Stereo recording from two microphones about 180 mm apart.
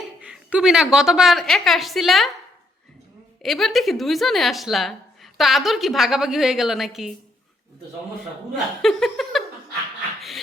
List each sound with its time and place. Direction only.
0.2 s a woman's voice: 5° right (ahead or behind)
3.4 s a woman's voice: centre (ahead or behind)
8.2 s a woman's voice: centre (ahead or behind)
10.2 s a sound: centre (ahead or behind)